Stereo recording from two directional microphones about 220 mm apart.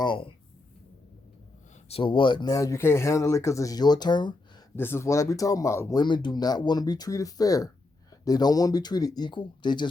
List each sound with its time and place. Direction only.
0.0 s speech: 20° left (ahead or behind)
1.9 s speech: 25° left (ahead or behind)